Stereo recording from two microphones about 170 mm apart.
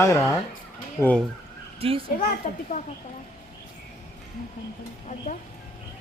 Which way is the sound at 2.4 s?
45° left (ahead or behind).